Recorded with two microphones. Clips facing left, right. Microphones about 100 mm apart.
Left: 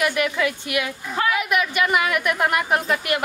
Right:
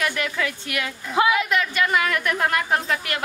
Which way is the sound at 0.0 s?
15° left (ahead or behind).